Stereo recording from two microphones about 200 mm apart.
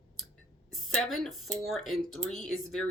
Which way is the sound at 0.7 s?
Centre (ahead or behind).